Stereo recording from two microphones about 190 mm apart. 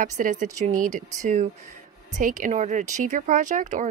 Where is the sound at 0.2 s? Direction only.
40° right (ahead or behind).